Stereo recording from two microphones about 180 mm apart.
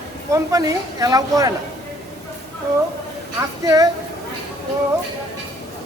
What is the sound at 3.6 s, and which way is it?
Speech, 20° right (ahead or behind).